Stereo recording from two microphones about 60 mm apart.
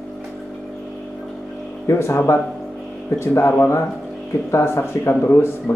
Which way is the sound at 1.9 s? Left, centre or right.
Left.